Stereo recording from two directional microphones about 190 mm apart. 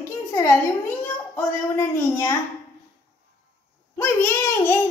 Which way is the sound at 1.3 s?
15° left (ahead or behind).